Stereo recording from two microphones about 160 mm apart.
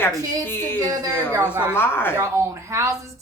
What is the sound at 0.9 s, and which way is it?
Speech, 20° right (ahead or behind).